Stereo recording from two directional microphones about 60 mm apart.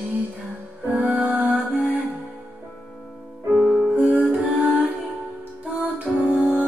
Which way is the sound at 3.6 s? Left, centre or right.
Left.